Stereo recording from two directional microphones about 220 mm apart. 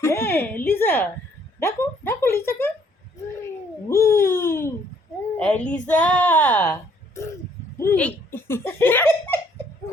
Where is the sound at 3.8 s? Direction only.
10° left (ahead or behind).